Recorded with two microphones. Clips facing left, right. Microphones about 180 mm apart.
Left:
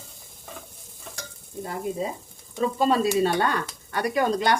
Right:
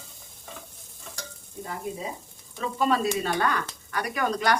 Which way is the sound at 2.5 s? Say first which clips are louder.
Left 3 dB; 30° left (ahead or behind).